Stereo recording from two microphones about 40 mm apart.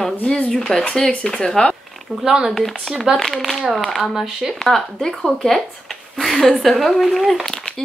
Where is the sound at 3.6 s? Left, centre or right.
Centre.